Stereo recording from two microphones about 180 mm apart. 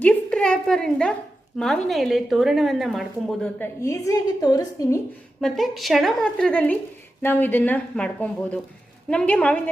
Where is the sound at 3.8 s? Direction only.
15° left (ahead or behind).